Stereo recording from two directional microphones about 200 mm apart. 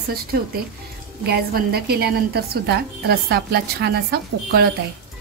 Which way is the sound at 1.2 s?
50° right (ahead or behind).